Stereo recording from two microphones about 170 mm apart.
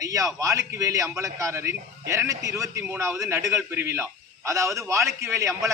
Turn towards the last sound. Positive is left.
turn(degrees=-15)  # may be behind; listen again after turning